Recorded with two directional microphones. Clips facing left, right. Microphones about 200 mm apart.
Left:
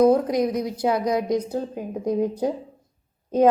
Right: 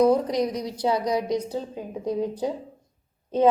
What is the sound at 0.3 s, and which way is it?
Speech, 10° left (ahead or behind).